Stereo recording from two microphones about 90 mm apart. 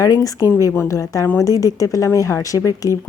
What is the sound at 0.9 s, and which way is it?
Speech, 40° left (ahead or behind).